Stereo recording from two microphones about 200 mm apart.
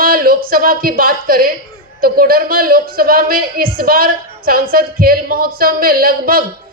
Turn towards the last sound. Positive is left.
turn(degrees=-45)  # may be behind; listen again after turning